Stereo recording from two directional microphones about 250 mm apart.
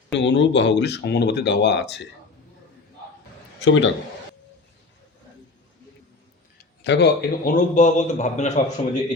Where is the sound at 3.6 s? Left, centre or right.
Left.